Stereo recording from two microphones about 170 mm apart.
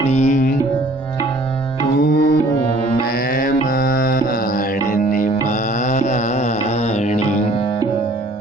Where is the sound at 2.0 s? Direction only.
85° left.